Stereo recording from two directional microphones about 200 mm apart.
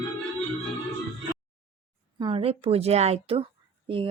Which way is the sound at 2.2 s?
30° right (ahead or behind).